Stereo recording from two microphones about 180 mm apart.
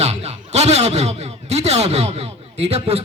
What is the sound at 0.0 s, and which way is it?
A man's voice, 35° right (ahead or behind).